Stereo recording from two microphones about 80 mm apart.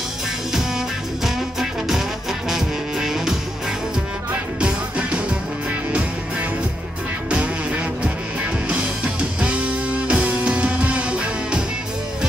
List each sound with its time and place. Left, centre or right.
0.5 s music: centre
4.6 s music: centre
7.2 s music: centre